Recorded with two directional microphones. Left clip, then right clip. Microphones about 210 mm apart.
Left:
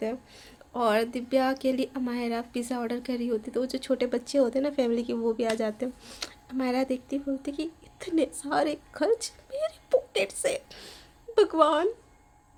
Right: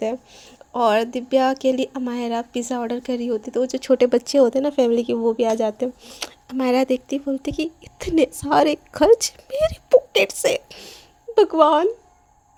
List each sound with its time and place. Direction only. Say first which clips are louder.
0.0 s speech: right 8 dB; 30° right (ahead or behind)